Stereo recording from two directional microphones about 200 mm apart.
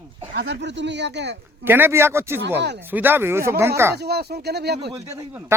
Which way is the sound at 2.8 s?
10° right (ahead or behind).